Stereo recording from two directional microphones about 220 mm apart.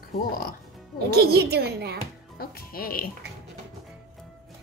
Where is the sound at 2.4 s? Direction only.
40° left (ahead or behind).